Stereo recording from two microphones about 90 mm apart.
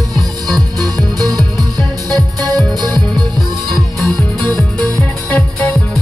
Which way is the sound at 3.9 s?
Centre (ahead or behind).